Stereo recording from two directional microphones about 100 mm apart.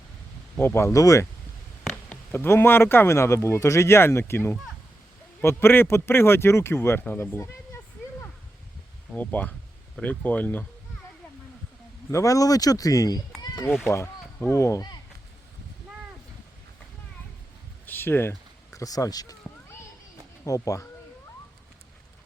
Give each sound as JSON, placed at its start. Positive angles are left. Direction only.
{"t": 0.5, "sound": "speech", "side_deg": 25}
{"t": 9.1, "sound": "speech", "side_deg": 15}
{"t": 12.1, "sound": "speech", "side_deg": 35}
{"t": 14.5, "sound": "speech", "side_deg": 30}
{"t": 17.8, "sound": "speech", "side_deg": 20}
{"t": 20.4, "sound": "speech", "side_deg": 30}